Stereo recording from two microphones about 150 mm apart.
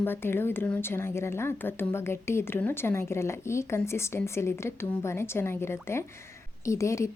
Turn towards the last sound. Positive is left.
turn(degrees=20)  # may be behind; listen again after turning